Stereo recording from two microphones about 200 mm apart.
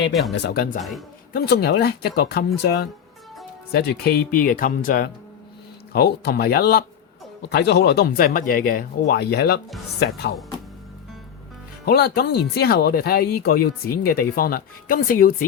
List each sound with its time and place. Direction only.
0.1 s speech: centre (ahead or behind)
0.3 s speech: 55° left (ahead or behind)
0.8 s speech: centre (ahead or behind)
1.3 s speech: 50° left (ahead or behind)
11.9 s speech: 50° left (ahead or behind)